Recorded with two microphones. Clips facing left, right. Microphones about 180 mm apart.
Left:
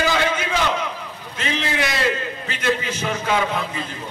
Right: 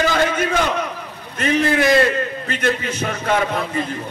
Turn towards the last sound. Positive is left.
turn(degrees=-50)  # may be behind; listen again after turning